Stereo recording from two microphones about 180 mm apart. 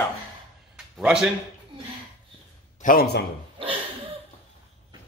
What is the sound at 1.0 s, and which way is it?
Speech, 5° right (ahead or behind).